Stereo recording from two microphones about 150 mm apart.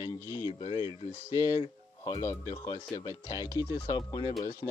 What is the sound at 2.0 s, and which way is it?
Speech, 25° left (ahead or behind).